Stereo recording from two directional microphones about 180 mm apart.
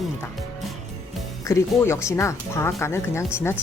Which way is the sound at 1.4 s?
15° left (ahead or behind).